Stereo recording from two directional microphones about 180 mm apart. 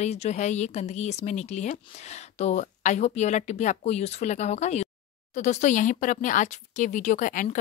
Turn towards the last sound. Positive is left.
turn(degrees=45)  # may be behind; listen again after turning